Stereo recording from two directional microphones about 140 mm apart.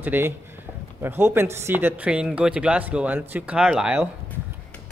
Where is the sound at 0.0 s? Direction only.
15° right (ahead or behind).